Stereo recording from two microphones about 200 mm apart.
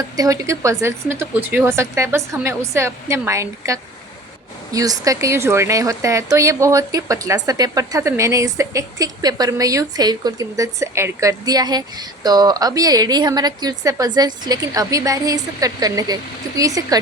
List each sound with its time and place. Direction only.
0.2 s speech: 15° right (ahead or behind)